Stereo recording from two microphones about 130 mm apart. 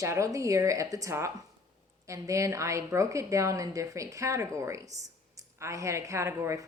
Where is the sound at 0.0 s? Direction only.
25° right (ahead or behind).